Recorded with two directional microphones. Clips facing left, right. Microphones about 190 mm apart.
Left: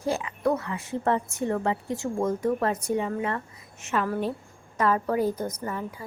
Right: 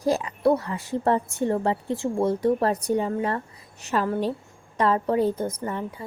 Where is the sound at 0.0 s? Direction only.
35° right (ahead or behind).